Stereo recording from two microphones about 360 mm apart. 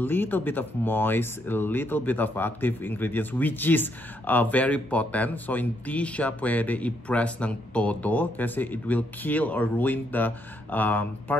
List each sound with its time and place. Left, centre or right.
0.0 s speech: centre